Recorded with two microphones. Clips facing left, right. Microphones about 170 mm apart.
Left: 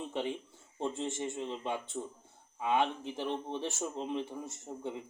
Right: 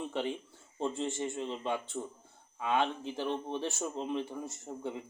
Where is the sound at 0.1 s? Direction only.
20° left (ahead or behind).